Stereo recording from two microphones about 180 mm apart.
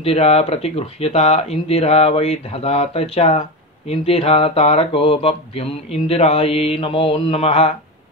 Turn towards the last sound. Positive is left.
turn(degrees=35)  # may be behind; listen again after turning